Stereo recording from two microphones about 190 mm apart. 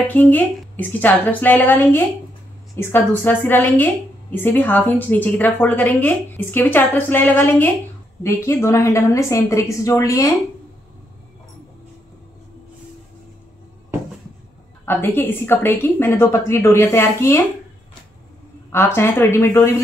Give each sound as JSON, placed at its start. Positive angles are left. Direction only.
{"t": 0.1, "sound": "a woman's voice", "side_deg": 10}
{"t": 14.9, "sound": "a woman's voice", "side_deg": 10}
{"t": 18.9, "sound": "a woman's voice", "side_deg": 15}